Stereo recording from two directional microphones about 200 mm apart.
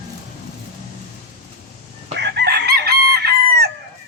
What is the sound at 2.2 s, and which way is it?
Chicken, 55° right (ahead or behind).